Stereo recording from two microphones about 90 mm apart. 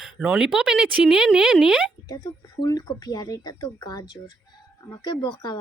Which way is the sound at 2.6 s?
50° left (ahead or behind).